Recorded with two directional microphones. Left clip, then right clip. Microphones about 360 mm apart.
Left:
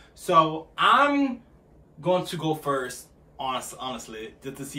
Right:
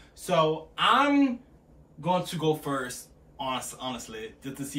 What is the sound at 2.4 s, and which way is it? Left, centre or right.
A man's voice, centre.